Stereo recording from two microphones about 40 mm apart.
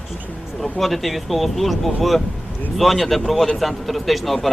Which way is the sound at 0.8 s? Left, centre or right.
Centre.